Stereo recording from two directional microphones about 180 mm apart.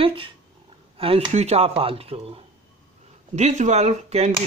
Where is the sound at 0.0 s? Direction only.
30° right (ahead or behind).